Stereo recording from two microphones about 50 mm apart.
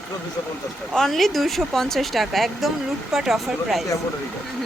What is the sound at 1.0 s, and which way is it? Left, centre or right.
Speech, centre.